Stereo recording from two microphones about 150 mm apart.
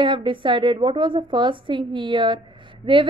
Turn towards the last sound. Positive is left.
turn(degrees=-35)  # may be behind; listen again after turning